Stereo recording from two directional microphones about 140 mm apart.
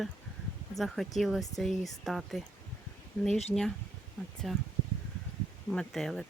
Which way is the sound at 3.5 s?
5° left (ahead or behind).